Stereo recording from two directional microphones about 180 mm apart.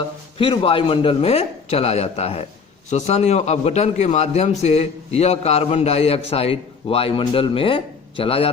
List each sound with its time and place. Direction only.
0.3 s a man's voice: 30° left (ahead or behind)